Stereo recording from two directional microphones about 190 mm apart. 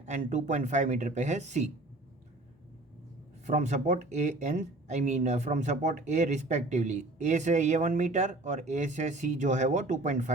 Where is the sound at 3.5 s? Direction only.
40° right (ahead or behind).